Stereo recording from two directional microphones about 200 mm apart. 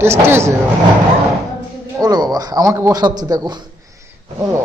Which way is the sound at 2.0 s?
20° right (ahead or behind).